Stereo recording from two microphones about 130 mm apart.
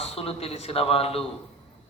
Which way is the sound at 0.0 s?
50° left (ahead or behind).